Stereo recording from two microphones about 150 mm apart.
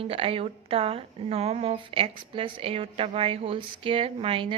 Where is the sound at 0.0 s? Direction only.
40° right (ahead or behind).